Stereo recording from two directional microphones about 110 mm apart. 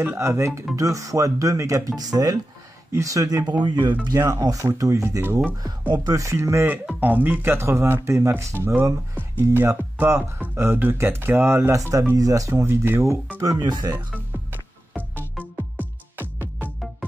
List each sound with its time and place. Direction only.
0.0 s speech: 20° right (ahead or behind)
13.4 s speech: 35° right (ahead or behind)
15.8 s music: 15° right (ahead or behind)